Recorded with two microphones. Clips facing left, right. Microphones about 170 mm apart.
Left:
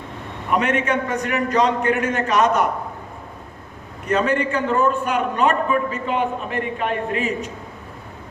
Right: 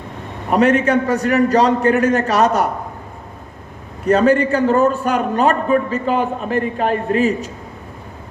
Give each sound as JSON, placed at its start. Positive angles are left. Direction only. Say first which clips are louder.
{"t": 0.5, "sound": "a man's voice", "louder": "right 6 dB", "side_deg": -35}
{"t": 4.0, "sound": "a man's voice", "louder": "right 6 dB", "side_deg": -35}